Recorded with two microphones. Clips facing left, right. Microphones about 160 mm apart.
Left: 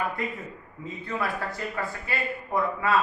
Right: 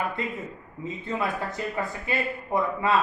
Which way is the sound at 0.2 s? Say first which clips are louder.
Right 1 dB; 25° right (ahead or behind).